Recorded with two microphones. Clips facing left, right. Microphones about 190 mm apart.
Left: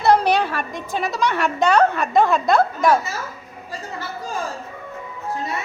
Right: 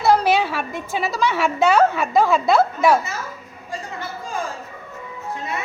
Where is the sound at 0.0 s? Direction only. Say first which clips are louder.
Even; 5° right (ahead or behind).